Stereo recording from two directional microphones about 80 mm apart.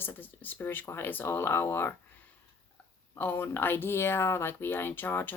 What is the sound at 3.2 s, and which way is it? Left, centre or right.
Speech, left.